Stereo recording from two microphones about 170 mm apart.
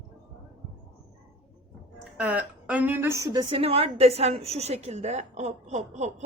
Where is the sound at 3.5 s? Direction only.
35° right (ahead or behind).